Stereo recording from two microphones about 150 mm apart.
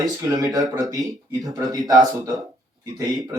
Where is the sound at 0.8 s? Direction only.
25° right (ahead or behind).